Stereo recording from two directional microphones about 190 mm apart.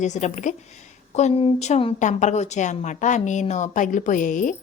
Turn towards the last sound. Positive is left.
turn(degrees=45)  # may be behind; listen again after turning